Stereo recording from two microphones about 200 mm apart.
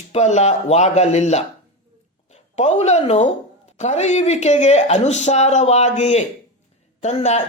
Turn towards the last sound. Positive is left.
turn(degrees=30)  # may be behind; listen again after turning